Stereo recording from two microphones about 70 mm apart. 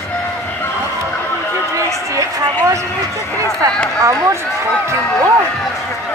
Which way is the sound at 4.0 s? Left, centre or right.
Right.